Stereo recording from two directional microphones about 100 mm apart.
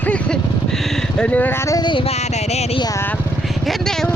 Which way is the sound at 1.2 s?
15° left (ahead or behind).